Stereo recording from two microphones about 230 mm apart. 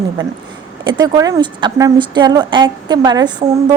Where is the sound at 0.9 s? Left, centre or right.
Centre.